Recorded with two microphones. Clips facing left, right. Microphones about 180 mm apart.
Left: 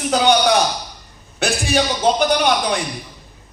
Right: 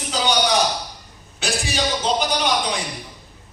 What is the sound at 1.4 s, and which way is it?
A man's voice, 60° left (ahead or behind).